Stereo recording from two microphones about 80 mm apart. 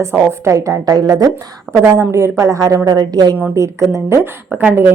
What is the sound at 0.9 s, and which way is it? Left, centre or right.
Speech, right.